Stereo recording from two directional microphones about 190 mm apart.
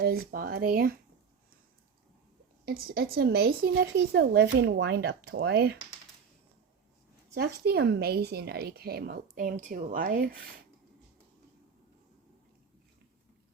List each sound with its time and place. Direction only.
0.0 s speech: 55° right (ahead or behind)
2.6 s a woman's voice: 55° right (ahead or behind)
7.3 s a woman's voice: 55° right (ahead or behind)